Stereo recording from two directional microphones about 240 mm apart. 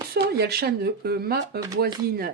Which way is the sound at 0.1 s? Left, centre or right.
Right.